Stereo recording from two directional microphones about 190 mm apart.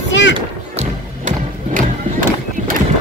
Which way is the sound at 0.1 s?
70° left (ahead or behind).